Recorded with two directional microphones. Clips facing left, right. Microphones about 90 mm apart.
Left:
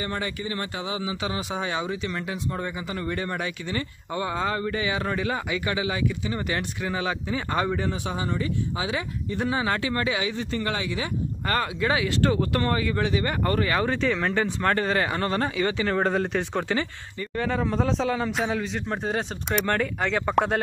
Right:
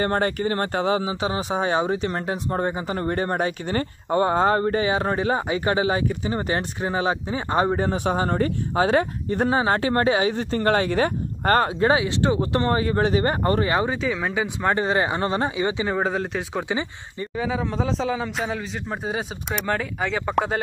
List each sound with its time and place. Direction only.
0.0 s speech: 50° right (ahead or behind)
1.2 s speech: 35° right (ahead or behind)
12.0 s speech: 20° right (ahead or behind)
13.8 s speech: 5° right (ahead or behind)
16.0 s speech: 5° right (ahead or behind)
16.6 s speech: 15° right (ahead or behind)
17.4 s speech: 5° right (ahead or behind)